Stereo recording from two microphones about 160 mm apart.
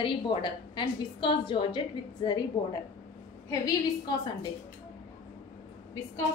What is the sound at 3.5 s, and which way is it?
Speech, 25° left (ahead or behind).